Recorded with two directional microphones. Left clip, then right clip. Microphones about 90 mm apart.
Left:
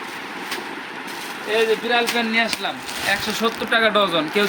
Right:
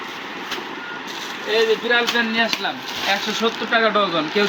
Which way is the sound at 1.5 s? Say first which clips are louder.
Right 1 dB; 45° left (ahead or behind).